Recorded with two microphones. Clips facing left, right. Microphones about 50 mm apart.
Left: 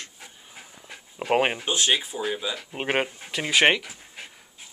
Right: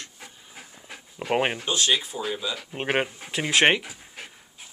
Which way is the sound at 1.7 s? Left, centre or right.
Centre.